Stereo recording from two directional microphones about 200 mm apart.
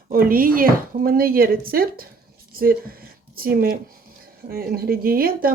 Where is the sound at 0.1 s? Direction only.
45° right (ahead or behind).